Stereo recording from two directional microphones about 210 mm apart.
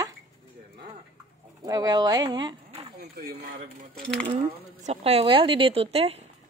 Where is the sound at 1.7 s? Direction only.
20° right (ahead or behind).